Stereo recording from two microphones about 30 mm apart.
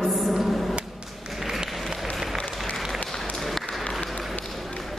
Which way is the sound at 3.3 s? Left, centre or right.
Centre.